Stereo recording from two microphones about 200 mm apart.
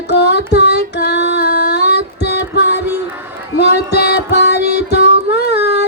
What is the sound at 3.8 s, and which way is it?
Music, 50° left (ahead or behind).